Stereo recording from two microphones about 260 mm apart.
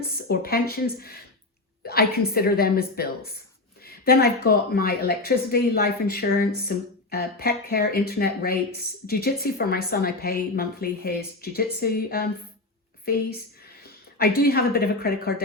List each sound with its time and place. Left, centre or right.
0.3 s a woman's voice: left
14.2 s a woman's voice: left